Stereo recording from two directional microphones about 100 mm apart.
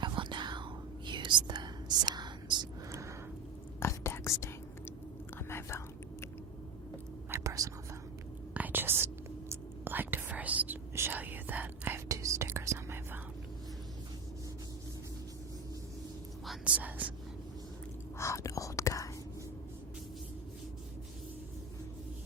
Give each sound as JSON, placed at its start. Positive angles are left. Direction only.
{"t": 0.0, "sound": "whispering", "side_deg": -50}
{"t": 3.8, "sound": "whispering", "side_deg": 25}
{"t": 7.3, "sound": "whispering", "side_deg": -30}
{"t": 8.5, "sound": "whispering", "side_deg": -20}
{"t": 12.0, "sound": "whispering", "side_deg": -30}
{"t": 16.6, "sound": "whispering", "side_deg": -15}
{"t": 18.2, "sound": "whispering", "side_deg": 30}